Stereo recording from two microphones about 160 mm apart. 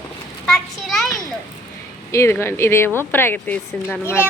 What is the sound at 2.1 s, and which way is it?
A woman's voice, 15° left (ahead or behind).